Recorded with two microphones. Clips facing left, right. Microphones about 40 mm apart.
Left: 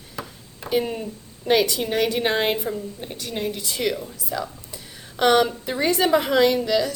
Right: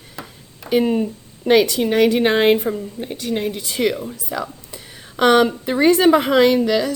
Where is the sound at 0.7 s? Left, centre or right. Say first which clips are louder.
Right 6 dB; right.